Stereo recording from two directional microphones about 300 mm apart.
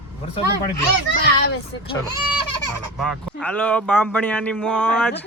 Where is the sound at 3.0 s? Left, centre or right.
Centre.